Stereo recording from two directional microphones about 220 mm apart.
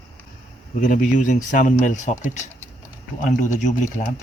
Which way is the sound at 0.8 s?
35° left (ahead or behind).